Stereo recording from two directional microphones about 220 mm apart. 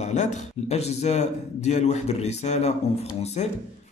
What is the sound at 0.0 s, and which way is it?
A man's voice, 30° left (ahead or behind).